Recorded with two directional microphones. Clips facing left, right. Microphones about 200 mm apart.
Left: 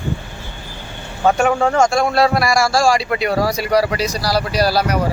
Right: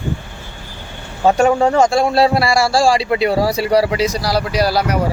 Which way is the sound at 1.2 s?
25° right (ahead or behind).